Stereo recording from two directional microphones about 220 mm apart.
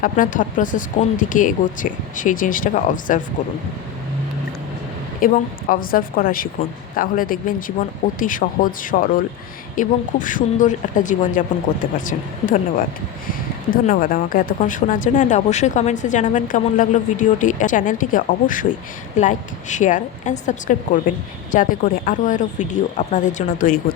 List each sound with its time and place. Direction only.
0.0 s speech: 35° left (ahead or behind)
5.2 s speech: 40° left (ahead or behind)